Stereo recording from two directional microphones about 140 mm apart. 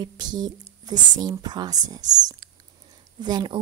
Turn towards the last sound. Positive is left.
turn(degrees=-30)  # may be behind; listen again after turning